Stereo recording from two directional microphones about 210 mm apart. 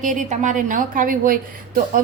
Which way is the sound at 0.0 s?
35° right (ahead or behind).